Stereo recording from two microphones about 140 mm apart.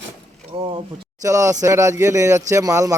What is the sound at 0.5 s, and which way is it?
Speech, 35° right (ahead or behind).